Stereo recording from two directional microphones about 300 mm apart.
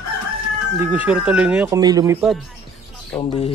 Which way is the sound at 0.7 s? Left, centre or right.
Centre.